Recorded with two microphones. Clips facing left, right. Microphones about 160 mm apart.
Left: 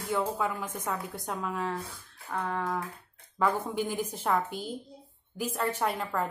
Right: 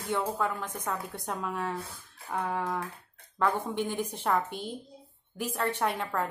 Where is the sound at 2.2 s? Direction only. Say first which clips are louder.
Right 1 dB; 10° right (ahead or behind).